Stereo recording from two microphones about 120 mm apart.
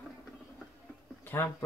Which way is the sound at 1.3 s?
15° left (ahead or behind).